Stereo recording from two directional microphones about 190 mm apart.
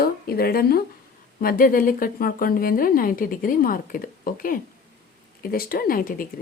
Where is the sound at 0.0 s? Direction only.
55° left (ahead or behind).